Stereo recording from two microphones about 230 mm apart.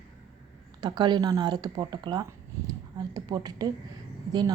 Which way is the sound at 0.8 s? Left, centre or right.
Centre.